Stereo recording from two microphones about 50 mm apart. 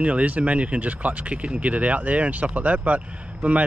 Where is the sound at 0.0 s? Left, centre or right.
Right.